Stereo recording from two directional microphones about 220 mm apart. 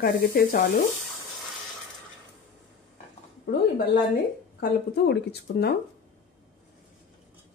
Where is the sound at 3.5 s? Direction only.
40° left (ahead or behind).